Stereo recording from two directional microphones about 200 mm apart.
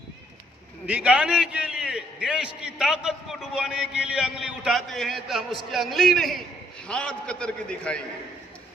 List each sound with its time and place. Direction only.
0.9 s a man's voice: 5° right (ahead or behind)